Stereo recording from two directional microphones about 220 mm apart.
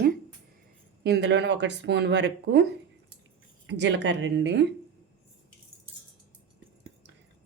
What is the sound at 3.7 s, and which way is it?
Speech, 55° right (ahead or behind).